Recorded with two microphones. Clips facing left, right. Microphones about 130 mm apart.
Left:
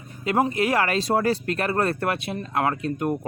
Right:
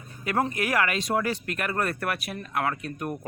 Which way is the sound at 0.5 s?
25° left (ahead or behind).